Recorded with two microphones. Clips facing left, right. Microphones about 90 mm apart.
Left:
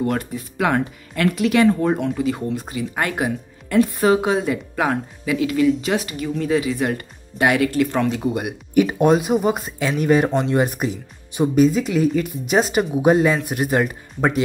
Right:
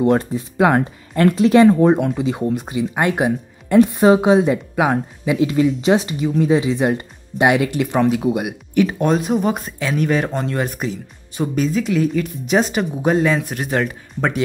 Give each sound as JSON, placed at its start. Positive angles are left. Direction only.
{"t": 0.0, "sound": "speech", "side_deg": -25}
{"t": 8.1, "sound": "speech", "side_deg": -5}
{"t": 8.7, "sound": "speech", "side_deg": 5}